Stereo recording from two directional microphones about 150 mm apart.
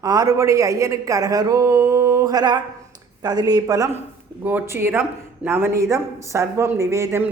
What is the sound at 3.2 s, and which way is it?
Speech, 25° right (ahead or behind).